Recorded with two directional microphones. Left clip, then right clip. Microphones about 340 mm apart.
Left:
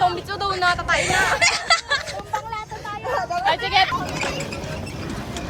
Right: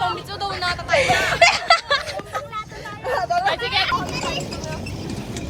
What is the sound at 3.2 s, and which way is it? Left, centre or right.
Vehicle, centre.